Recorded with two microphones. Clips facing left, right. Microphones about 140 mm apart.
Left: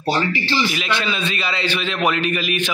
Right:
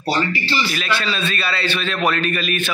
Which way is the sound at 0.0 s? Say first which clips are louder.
Even; 20° left (ahead or behind).